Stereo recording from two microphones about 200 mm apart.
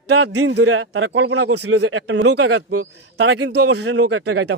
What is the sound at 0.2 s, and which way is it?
A man's voice, 75° right (ahead or behind).